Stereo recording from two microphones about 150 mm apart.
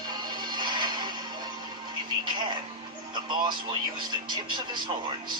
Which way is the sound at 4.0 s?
30° right (ahead or behind).